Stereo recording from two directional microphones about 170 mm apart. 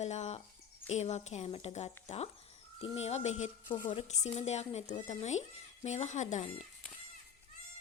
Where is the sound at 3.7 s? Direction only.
30° left (ahead or behind).